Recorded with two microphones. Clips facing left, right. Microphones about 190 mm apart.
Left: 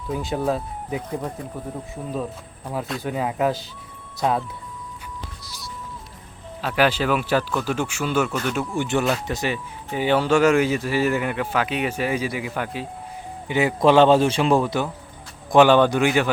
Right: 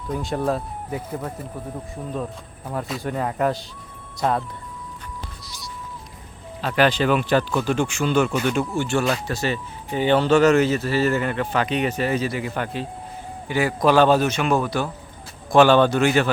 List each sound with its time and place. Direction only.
0.1 s speech: centre (ahead or behind)
2.7 s speech: centre (ahead or behind)
6.6 s speech: 10° left (ahead or behind)
8.7 s speech: 15° left (ahead or behind)
13.5 s speech: 20° left (ahead or behind)